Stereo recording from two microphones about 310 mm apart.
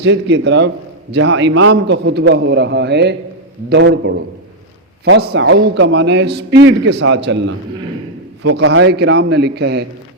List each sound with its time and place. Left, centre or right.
0.0 s a man's voice: right